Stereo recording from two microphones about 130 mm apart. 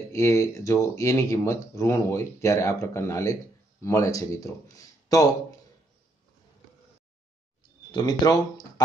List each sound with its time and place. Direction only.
0.1 s speech: 25° left (ahead or behind)
7.9 s speech: 30° left (ahead or behind)